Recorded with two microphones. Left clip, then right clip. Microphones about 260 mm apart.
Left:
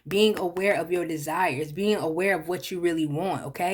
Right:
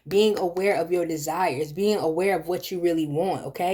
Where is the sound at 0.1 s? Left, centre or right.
Left.